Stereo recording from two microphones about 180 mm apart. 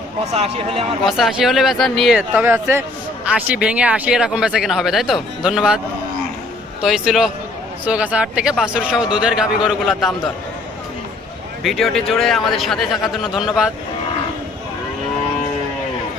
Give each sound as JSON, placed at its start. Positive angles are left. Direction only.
{"t": 0.3, "sound": "speech", "side_deg": -35}
{"t": 1.0, "sound": "speech", "side_deg": 0}
{"t": 6.8, "sound": "speech", "side_deg": 0}
{"t": 11.6, "sound": "speech", "side_deg": 0}